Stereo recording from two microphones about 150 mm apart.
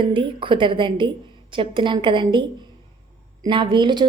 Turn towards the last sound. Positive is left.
turn(degrees=-30)  # may be behind; listen again after turning